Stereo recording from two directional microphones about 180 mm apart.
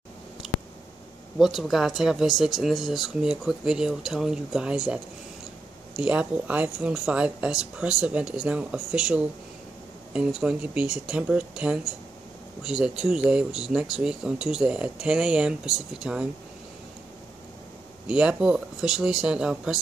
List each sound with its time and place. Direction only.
1.4 s speech: centre (ahead or behind)
18.0 s speech: 5° right (ahead or behind)